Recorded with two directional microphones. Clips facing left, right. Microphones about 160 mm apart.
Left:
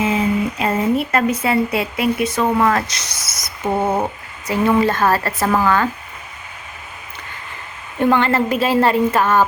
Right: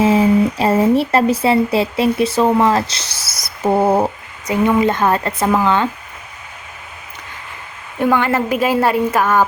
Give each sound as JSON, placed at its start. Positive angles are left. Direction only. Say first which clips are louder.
{"t": 0.0, "sound": "speech", "louder": "right 6 dB", "side_deg": -35}
{"t": 4.4, "sound": "a woman's voice", "louder": "right 1 dB", "side_deg": -20}
{"t": 7.9, "sound": "a woman's voice", "louder": "even", "side_deg": -5}